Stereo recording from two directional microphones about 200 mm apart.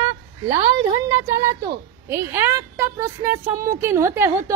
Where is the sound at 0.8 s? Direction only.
20° right (ahead or behind).